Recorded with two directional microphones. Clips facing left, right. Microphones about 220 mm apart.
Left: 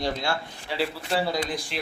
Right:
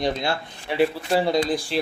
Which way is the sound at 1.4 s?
30° right (ahead or behind).